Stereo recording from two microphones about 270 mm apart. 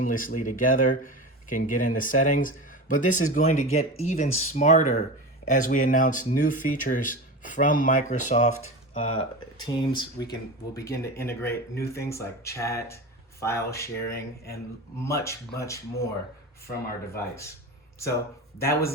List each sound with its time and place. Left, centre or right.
0.0 s speech: left; by 13.9 s centre
14.1 s speech: left
15.0 s speech: centre
17.2 s speech: centre
18.6 s speech: centre